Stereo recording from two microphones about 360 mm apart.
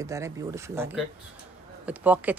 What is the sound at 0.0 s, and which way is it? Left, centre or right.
Speech, centre.